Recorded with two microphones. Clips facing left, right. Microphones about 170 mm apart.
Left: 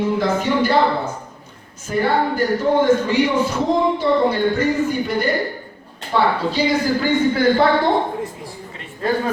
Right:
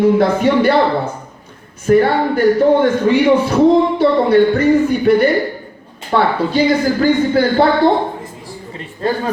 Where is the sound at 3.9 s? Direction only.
65° right (ahead or behind).